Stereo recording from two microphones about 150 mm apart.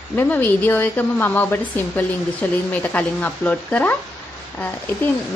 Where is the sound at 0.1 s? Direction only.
10° left (ahead or behind).